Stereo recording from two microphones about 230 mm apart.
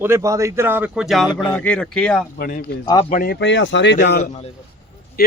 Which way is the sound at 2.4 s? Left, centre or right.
Left.